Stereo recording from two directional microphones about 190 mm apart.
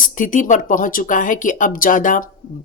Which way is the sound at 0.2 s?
45° left (ahead or behind).